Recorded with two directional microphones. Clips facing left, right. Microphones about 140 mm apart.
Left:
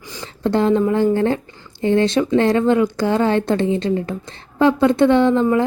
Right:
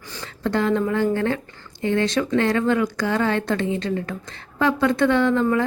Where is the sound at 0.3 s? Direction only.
30° left (ahead or behind).